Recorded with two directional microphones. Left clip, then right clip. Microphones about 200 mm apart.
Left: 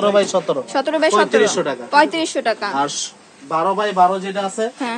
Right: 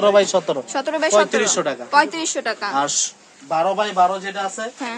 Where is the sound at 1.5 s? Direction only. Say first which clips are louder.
Left 1 dB; 60° right (ahead or behind).